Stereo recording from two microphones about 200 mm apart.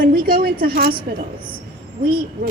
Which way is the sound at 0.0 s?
45° right (ahead or behind).